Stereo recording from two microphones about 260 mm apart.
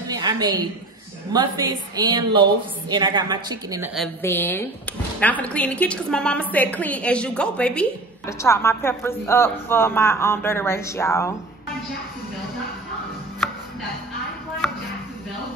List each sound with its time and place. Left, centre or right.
0.1 s a sound: centre
1.3 s speech: centre
3.9 s a woman's voice: centre